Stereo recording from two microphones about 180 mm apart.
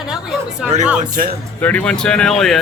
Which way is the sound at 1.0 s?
50° right (ahead or behind).